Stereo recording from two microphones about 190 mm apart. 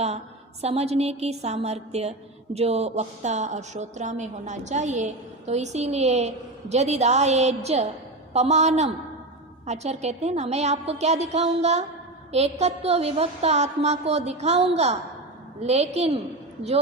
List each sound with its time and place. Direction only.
0.6 s a woman's voice: 35° right (ahead or behind)